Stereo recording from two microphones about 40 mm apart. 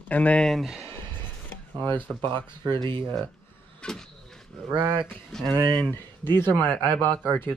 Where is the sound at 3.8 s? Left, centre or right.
Left.